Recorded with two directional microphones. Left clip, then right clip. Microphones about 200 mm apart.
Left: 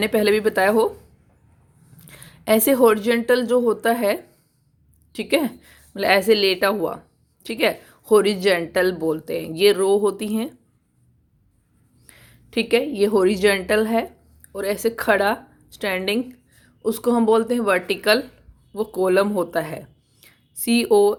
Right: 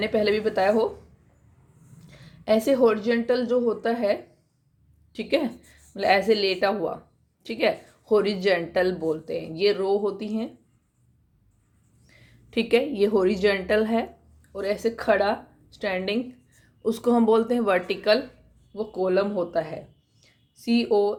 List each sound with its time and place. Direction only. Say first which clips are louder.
0.0 s a woman's voice: left 5 dB; 35° left (ahead or behind)
2.0 s a woman's voice: left 3 dB; 40° left (ahead or behind)
12.0 s a woman's voice: left 5 dB; 35° left (ahead or behind)
20.2 s a sound: left 4 dB; 40° left (ahead or behind)